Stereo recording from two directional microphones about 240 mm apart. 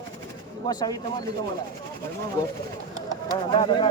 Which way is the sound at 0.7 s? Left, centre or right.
Centre.